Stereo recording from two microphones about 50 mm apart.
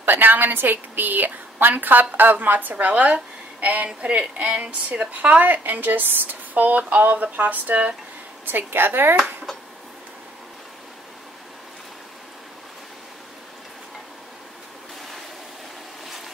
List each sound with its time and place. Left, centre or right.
0.0 s a woman's voice: right
8.5 s a woman's voice: right